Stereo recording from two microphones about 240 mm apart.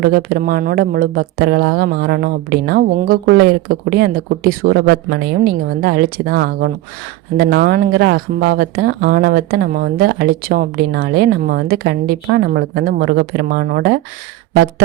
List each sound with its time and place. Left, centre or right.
0.0 s speech: right